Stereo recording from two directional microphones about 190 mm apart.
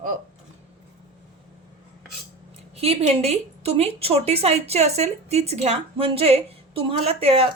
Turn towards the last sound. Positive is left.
turn(degrees=-30)  # may be behind; listen again after turning